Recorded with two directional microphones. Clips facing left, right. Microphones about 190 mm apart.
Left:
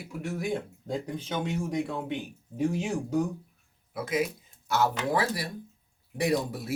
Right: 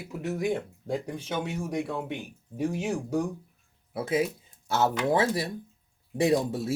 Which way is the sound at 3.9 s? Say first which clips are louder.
Right 2 dB; 30° right (ahead or behind).